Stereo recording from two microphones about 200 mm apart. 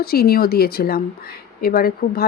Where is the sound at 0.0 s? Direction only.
50° left (ahead or behind).